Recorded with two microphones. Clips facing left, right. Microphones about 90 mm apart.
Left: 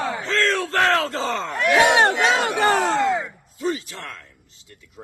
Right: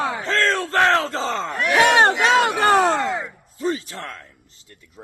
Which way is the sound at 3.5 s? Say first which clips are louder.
Right 1 dB; 40° right (ahead or behind).